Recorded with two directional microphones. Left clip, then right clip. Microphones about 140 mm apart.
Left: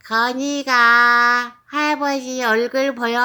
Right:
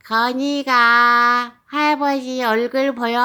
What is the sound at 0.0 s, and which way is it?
Child singing, 25° right (ahead or behind).